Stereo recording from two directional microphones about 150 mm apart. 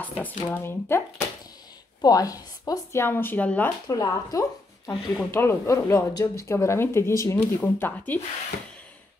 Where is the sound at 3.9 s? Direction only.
25° left (ahead or behind).